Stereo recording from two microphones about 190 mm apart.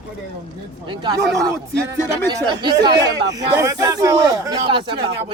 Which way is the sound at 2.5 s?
25° right (ahead or behind).